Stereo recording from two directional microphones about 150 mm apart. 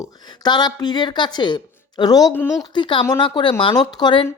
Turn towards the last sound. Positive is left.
turn(degrees=30)  # may be behind; listen again after turning